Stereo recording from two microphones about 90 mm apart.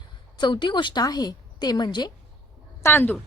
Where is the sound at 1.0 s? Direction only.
50° left (ahead or behind).